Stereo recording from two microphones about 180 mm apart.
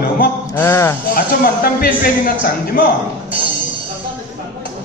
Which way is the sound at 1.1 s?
50° left (ahead or behind).